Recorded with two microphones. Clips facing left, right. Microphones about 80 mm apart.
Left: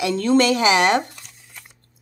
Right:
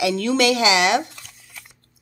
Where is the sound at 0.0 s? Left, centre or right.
Left.